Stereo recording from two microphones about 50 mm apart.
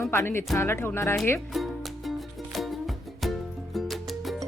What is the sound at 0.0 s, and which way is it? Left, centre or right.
Speech, left.